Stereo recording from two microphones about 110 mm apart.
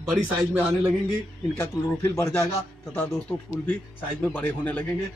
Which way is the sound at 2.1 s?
25° left (ahead or behind).